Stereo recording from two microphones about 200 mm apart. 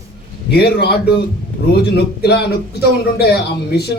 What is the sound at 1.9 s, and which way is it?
Speech, 55° left (ahead or behind).